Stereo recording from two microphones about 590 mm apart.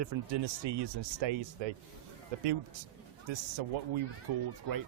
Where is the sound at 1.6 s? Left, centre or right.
Right.